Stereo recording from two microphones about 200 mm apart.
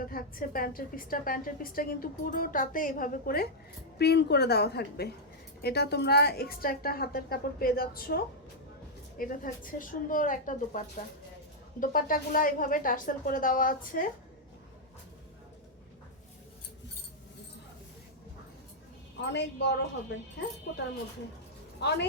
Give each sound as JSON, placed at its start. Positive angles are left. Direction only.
{"t": 0.0, "sound": "a woman's voice", "side_deg": 45}
{"t": 19.2, "sound": "a woman's voice", "side_deg": 60}
{"t": 21.8, "sound": "a woman's voice", "side_deg": 55}